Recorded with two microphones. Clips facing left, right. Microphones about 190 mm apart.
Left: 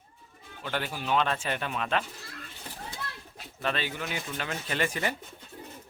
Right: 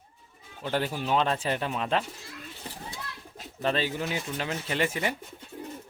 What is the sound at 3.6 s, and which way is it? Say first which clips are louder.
Speech: right 4 dB; 35° right (ahead or behind).